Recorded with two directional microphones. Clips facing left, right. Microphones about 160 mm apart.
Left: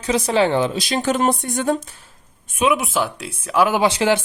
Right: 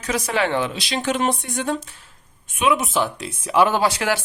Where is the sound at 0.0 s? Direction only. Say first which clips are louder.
Left 5 dB; 30° left (ahead or behind); by 1.8 s 45° left (ahead or behind).